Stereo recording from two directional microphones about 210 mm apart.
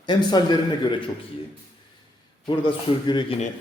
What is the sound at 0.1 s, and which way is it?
Speech, 20° left (ahead or behind).